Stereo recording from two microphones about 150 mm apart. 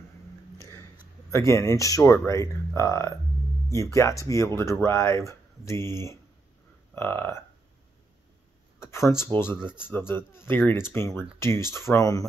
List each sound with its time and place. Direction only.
1.3 s speech: 20° left (ahead or behind)
8.8 s speech: 15° left (ahead or behind)